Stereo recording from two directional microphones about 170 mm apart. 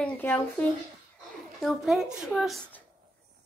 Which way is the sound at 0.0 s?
10° left (ahead or behind).